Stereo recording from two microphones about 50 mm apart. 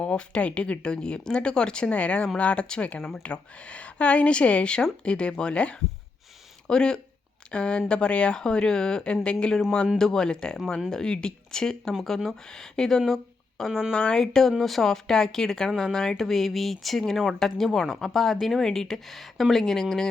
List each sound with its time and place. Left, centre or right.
0.0 s speech: left
13.7 s speech: centre
13.9 s speech: centre